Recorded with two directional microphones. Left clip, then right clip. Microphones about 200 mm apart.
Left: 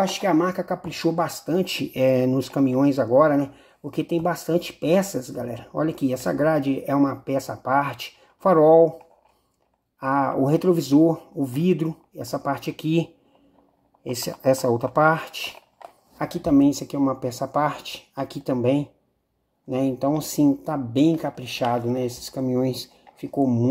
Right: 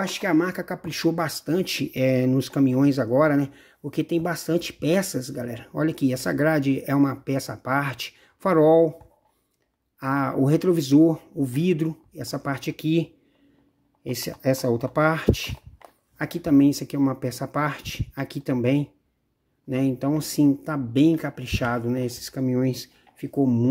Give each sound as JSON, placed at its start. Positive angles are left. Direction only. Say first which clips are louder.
{"t": 0.0, "sound": "speech", "louder": "left 2 dB", "side_deg": -25}
{"t": 9.9, "sound": "speech", "louder": "left 3 dB", "side_deg": -25}